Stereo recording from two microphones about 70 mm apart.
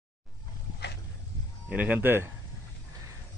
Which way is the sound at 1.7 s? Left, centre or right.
Right.